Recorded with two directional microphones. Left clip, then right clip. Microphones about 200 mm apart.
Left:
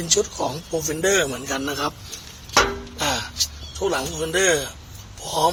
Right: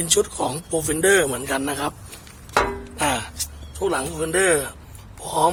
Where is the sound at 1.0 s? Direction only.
30° right (ahead or behind).